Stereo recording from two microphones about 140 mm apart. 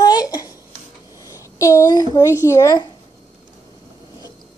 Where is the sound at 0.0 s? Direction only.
25° left (ahead or behind).